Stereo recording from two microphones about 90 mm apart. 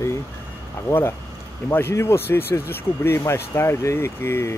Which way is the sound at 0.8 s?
25° left (ahead or behind).